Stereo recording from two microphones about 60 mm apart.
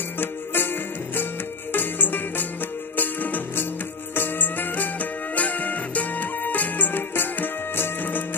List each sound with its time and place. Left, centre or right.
0.2 s music: left